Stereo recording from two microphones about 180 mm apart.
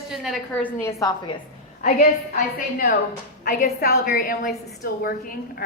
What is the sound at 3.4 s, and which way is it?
A woman's voice, 55° left (ahead or behind).